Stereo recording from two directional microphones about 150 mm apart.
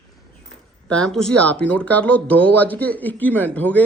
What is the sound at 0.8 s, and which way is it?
A man's voice, 5° left (ahead or behind).